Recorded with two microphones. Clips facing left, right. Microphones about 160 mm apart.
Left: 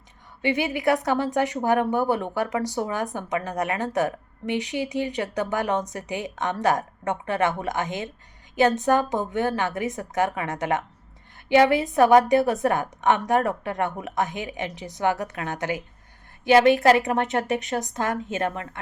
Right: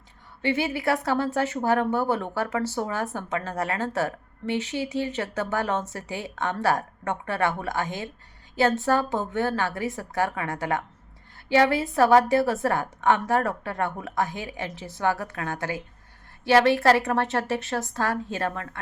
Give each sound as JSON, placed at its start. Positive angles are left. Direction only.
{"t": 0.4, "sound": "a woman's voice", "side_deg": 15}